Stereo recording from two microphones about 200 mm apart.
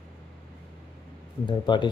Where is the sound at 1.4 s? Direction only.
25° left (ahead or behind).